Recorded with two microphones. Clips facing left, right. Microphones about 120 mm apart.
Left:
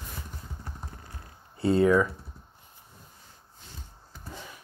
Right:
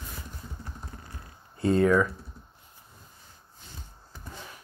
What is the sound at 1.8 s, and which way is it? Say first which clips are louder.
Speech: left 1 dB; 10° left (ahead or behind).